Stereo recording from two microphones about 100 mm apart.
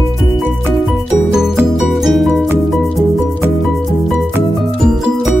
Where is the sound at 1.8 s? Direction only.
Centre (ahead or behind).